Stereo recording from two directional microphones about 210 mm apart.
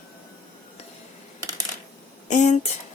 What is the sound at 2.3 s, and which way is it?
Speech, 35° left (ahead or behind).